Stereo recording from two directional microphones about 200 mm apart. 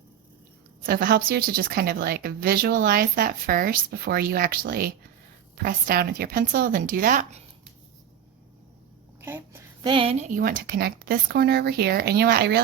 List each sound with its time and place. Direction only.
0.8 s speech: 45° right (ahead or behind)
9.2 s a sound: 10° right (ahead or behind)
9.9 s speech: 30° right (ahead or behind); by 12.6 s 55° right (ahead or behind)